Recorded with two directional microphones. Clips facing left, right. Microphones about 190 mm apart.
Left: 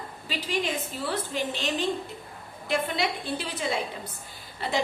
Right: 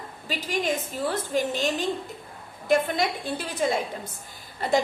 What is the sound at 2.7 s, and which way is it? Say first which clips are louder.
A woman's voice: right 5 dB; 45° right (ahead or behind).